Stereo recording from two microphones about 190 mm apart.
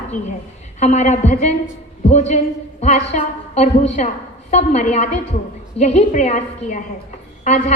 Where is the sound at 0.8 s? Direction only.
35° left (ahead or behind).